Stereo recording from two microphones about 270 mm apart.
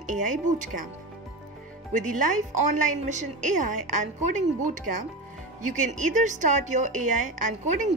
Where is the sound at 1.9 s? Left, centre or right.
Right.